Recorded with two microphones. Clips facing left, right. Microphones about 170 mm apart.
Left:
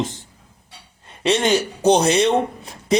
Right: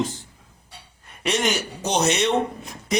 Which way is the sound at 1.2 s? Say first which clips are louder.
Left 6 dB; 30° left (ahead or behind).